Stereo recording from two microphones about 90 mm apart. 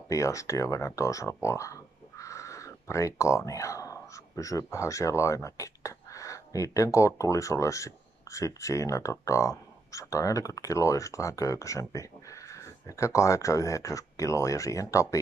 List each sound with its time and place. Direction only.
0.1 s speech: 35° left (ahead or behind)